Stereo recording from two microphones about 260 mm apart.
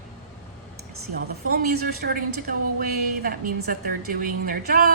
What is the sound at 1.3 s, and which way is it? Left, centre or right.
A woman's voice, right.